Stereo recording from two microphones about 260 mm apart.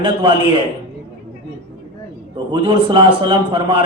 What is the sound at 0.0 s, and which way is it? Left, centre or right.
Speech, centre.